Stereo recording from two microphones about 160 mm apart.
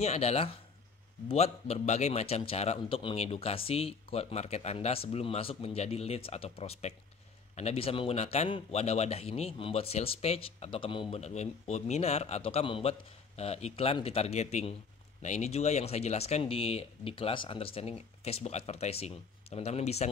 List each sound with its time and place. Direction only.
0.0 s a man's voice: 40° left (ahead or behind)